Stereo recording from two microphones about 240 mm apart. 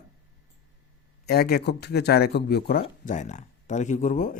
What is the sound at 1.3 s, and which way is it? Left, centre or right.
Speech, left.